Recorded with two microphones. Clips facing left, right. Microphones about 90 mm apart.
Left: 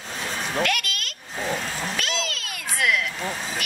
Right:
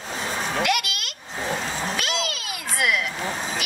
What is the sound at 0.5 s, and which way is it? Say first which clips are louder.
Cat: right 1 dB; 10° right (ahead or behind).